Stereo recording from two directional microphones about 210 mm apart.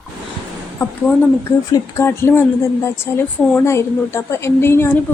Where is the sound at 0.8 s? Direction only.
10° left (ahead or behind).